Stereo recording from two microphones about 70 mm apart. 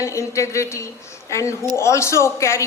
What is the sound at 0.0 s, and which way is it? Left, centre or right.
A man's voice, left.